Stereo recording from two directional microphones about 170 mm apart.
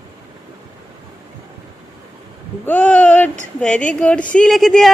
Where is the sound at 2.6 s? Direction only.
10° left (ahead or behind).